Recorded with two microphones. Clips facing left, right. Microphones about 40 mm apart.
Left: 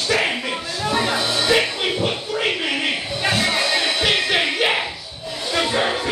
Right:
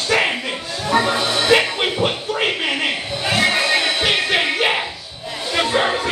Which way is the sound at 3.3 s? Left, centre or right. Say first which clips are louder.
Right 4 dB; right.